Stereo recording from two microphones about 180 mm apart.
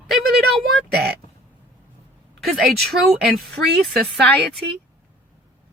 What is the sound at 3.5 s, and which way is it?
Speech, 70° right (ahead or behind).